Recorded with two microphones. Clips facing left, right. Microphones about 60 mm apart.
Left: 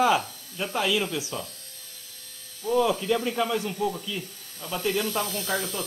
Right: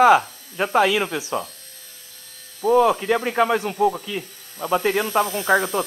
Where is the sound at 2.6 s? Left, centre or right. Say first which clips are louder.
Right 7 dB; right.